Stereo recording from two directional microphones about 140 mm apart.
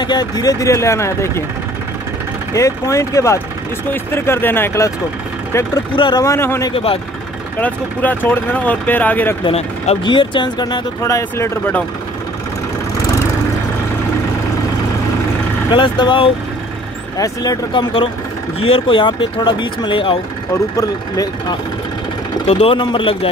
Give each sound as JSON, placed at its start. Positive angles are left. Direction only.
{"t": 0.0, "sound": "speech", "side_deg": 30}
{"t": 2.5, "sound": "speech", "side_deg": 20}
{"t": 5.9, "sound": "speech", "side_deg": 35}
{"t": 6.2, "sound": "speech", "side_deg": 20}
{"t": 6.7, "sound": "speech", "side_deg": 40}
{"t": 7.6, "sound": "speech", "side_deg": 10}
{"t": 9.4, "sound": "speech", "side_deg": 40}
{"t": 11.0, "sound": "speech", "side_deg": 20}
{"t": 15.7, "sound": "speech", "side_deg": 35}
{"t": 18.6, "sound": "speech", "side_deg": 40}
{"t": 20.5, "sound": "speech", "side_deg": 25}
{"t": 22.5, "sound": "speech", "side_deg": 40}